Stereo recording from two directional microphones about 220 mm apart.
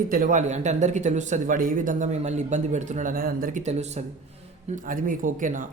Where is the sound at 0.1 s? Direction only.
35° right (ahead or behind).